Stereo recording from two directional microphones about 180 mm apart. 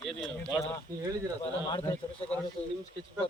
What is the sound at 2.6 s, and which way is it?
Speech, 35° left (ahead or behind).